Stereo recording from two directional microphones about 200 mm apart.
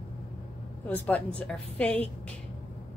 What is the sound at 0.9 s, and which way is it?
A woman's voice, 10° left (ahead or behind).